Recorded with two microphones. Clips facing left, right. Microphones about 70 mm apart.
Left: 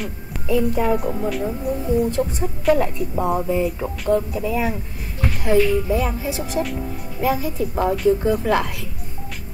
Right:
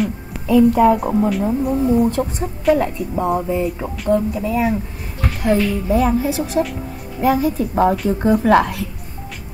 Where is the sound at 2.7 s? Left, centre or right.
Centre.